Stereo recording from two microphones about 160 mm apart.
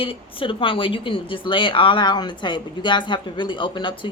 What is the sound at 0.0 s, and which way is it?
Speech, 35° left (ahead or behind).